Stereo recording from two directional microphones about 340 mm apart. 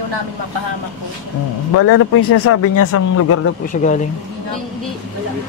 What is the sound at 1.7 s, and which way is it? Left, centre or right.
Speech, left.